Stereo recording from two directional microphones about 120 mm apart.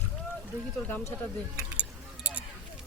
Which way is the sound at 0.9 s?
15° left (ahead or behind).